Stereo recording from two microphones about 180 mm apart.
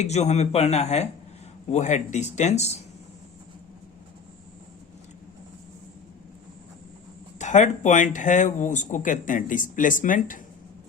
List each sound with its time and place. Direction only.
0.0 s speech: 40° left (ahead or behind)
7.3 s speech: 40° left (ahead or behind)